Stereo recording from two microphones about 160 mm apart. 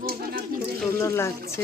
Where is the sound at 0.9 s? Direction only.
15° left (ahead or behind).